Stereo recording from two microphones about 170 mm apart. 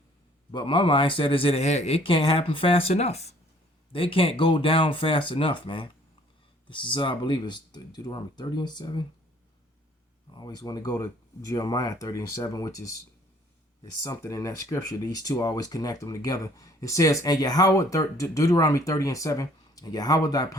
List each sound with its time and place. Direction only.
0.5 s speech: 30° left (ahead or behind)
10.3 s speech: 25° left (ahead or behind)
14.0 s speech: 20° left (ahead or behind)